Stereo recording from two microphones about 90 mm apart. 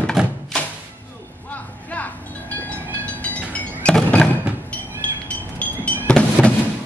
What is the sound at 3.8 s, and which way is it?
Music, 10° left (ahead or behind).